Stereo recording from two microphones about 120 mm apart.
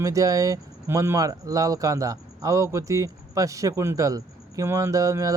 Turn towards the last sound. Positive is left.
turn(degrees=-30)  # may be behind; listen again after turning